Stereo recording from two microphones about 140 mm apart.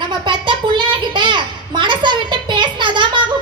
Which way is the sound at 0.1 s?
35° right (ahead or behind).